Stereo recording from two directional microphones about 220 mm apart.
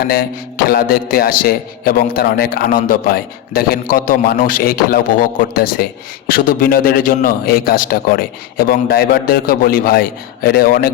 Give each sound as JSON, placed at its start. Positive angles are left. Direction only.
{"t": 0.0, "sound": "a man's voice", "side_deg": 45}